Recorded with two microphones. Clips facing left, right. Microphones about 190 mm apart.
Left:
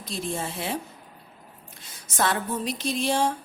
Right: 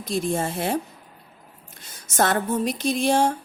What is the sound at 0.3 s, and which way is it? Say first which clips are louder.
Speech: right 4 dB; 50° right (ahead or behind).